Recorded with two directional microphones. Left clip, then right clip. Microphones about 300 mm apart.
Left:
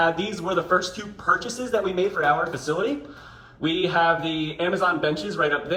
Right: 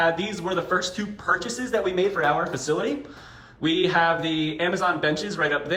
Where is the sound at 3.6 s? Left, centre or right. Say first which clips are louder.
Even; centre.